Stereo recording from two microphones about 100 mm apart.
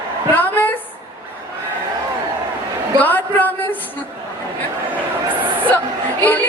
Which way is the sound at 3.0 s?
20° left (ahead or behind).